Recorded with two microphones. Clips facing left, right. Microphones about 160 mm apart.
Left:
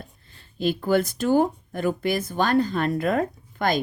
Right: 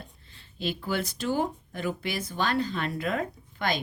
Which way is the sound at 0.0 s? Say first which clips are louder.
Left 3 dB; 45° left (ahead or behind).